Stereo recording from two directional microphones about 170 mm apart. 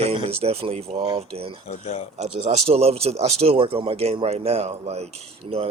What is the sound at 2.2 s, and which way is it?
Speech, 40° right (ahead or behind).